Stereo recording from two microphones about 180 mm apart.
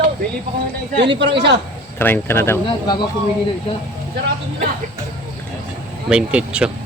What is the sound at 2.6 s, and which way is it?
Speech, 25° left (ahead or behind).